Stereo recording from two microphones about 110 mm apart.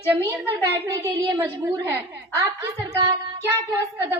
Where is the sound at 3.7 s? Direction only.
20° right (ahead or behind).